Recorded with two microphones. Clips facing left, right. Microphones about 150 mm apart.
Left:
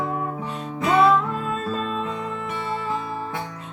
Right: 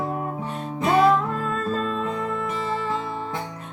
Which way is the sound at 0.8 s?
45° right (ahead or behind).